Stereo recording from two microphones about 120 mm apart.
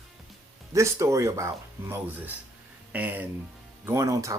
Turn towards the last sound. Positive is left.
turn(degrees=-25)  # may be behind; listen again after turning